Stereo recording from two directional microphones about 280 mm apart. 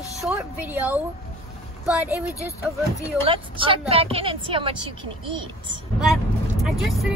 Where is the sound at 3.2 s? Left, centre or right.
Centre.